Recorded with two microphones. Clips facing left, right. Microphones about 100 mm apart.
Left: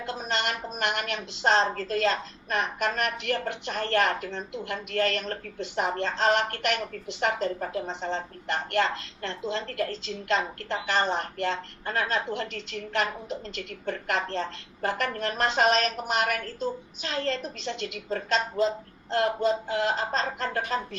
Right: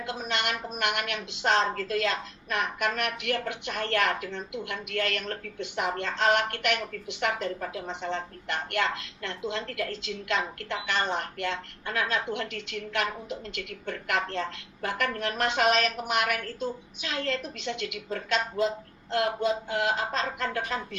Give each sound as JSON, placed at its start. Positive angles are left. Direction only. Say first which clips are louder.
{"t": 0.0, "sound": "a woman's voice", "louder": "left 1 dB", "side_deg": 40}